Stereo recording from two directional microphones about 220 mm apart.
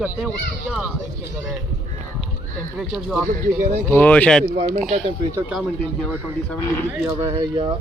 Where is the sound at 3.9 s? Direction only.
5° left (ahead or behind).